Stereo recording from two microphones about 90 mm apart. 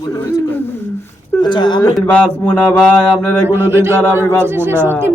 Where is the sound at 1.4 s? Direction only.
55° left (ahead or behind).